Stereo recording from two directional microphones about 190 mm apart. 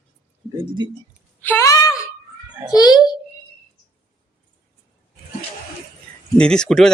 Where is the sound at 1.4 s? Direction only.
15° left (ahead or behind).